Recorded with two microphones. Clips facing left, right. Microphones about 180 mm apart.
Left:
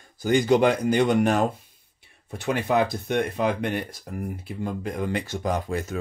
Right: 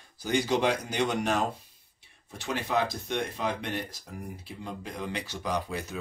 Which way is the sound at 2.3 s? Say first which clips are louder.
Left 6 dB; 60° left (ahead or behind).